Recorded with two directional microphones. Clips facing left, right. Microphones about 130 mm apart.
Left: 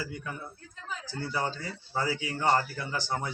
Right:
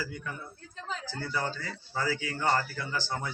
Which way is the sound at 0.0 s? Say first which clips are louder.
Even; 20° left (ahead or behind).